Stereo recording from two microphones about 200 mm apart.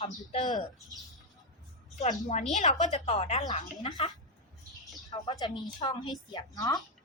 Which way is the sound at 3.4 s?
20° left (ahead or behind).